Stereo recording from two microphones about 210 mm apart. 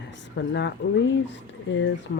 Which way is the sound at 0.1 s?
55° left (ahead or behind).